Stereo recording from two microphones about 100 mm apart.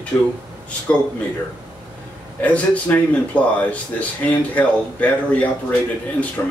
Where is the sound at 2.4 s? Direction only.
15° left (ahead or behind).